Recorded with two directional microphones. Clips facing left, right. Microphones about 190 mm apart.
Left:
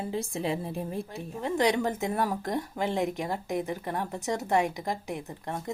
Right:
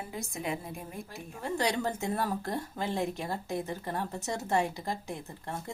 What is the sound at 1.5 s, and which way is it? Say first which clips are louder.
Speech: left 5 dB; 15° left (ahead or behind).